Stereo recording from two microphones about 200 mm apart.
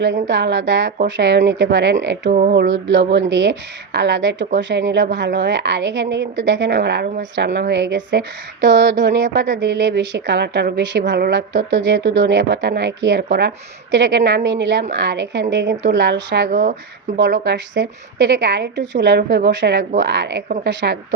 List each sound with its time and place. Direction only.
0.0 s speech: 60° right (ahead or behind)
2.3 s frog: 40° right (ahead or behind)
2.6 s speech: 60° right (ahead or behind)
16.5 s speech: 45° right (ahead or behind)
17.2 s speech: 60° right (ahead or behind)